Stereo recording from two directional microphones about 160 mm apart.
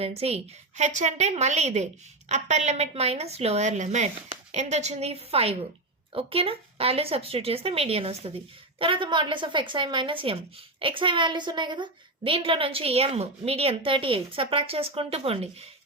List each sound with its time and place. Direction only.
0.0 s a woman's voice: 40° right (ahead or behind)